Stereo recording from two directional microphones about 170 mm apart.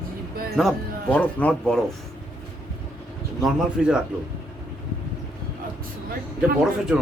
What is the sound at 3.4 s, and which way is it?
Speech, 5° right (ahead or behind).